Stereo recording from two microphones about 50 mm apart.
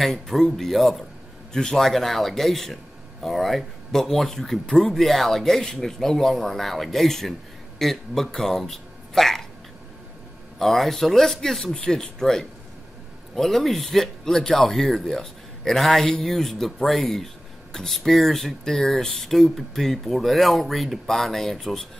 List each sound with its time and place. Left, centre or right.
0.0 s a man's voice: centre
10.6 s a man's voice: centre